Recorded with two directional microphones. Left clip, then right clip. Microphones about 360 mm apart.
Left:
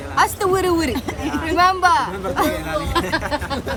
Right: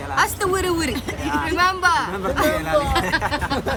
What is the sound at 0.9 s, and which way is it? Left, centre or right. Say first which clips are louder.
Speech: left 1 dB; centre.